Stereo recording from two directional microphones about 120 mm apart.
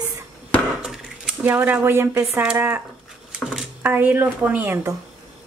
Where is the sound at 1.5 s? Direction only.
15° right (ahead or behind).